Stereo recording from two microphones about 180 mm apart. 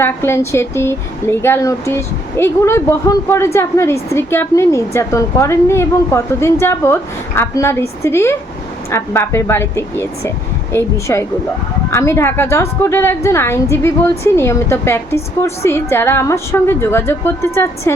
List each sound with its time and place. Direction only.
0.0 s a woman's voice: 15° left (ahead or behind)